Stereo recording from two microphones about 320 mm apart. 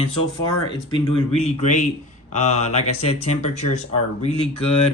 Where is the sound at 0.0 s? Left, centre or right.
Centre.